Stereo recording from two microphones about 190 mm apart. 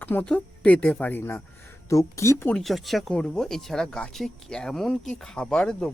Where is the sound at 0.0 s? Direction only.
10° left (ahead or behind).